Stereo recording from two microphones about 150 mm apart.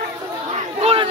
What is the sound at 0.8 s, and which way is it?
Speech, 45° right (ahead or behind).